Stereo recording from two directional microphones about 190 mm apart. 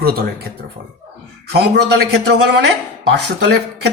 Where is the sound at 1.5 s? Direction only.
60° right (ahead or behind).